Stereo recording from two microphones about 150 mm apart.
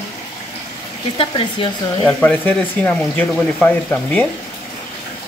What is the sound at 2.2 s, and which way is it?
Speech, 10° left (ahead or behind).